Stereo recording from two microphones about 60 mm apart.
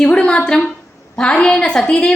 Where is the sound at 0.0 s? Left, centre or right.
Centre.